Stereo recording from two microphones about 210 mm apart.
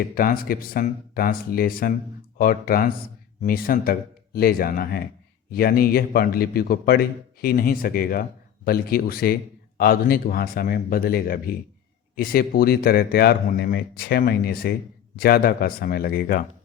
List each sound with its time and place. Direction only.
0.2 s a man's voice: 45° left (ahead or behind)